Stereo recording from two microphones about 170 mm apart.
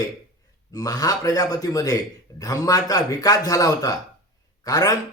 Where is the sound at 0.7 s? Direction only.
20° left (ahead or behind).